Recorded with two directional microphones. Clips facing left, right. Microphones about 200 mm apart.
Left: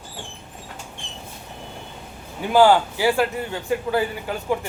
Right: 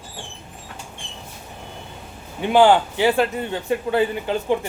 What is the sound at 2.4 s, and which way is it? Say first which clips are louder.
A man's voice: right 1 dB; 20° right (ahead or behind).